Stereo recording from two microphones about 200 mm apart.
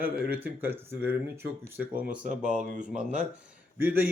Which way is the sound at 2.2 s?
40° right (ahead or behind).